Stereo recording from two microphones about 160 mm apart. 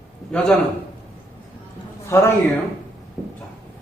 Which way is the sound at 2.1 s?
15° left (ahead or behind).